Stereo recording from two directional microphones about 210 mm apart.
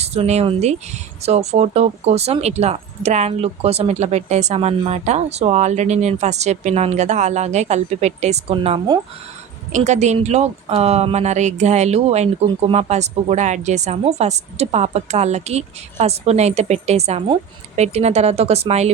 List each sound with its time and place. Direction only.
0.0 s speech: 30° right (ahead or behind)